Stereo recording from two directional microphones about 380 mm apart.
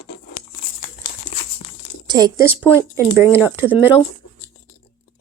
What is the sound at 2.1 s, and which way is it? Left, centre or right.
A woman's voice, centre.